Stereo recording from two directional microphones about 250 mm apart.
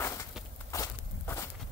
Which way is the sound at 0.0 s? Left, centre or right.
Centre.